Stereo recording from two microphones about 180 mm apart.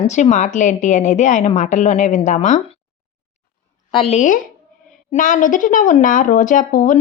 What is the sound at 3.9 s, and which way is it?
A woman's voice, 30° left (ahead or behind).